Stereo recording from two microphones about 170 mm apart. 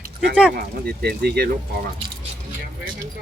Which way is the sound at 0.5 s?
70° right (ahead or behind).